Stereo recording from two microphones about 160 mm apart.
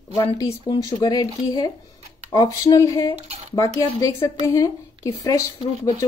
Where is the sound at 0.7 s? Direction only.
25° left (ahead or behind).